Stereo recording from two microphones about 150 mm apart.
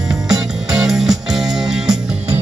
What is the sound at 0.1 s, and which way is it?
Music, 5° right (ahead or behind).